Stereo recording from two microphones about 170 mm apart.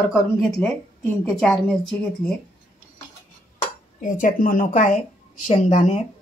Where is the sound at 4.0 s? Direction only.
50° left (ahead or behind).